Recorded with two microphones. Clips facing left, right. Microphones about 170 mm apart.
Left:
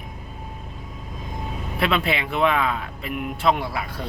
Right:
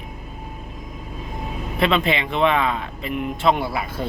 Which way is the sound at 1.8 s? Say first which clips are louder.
Right 3 dB; 5° left (ahead or behind).